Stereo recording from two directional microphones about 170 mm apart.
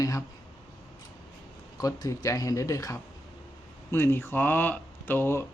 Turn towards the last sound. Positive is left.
turn(degrees=15)  # may be behind; listen again after turning